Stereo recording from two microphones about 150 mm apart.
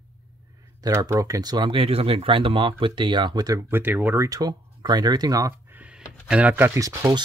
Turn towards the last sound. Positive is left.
turn(degrees=-20)  # may be behind; listen again after turning